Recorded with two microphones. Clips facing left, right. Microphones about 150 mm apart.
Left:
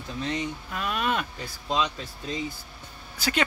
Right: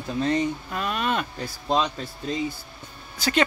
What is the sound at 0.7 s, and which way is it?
Speech, 5° left (ahead or behind).